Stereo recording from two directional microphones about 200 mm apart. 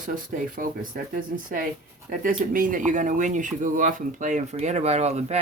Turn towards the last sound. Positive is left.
turn(degrees=-35)  # may be behind; listen again after turning